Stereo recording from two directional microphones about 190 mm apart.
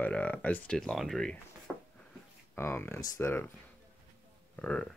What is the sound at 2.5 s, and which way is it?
Speech, 15° left (ahead or behind).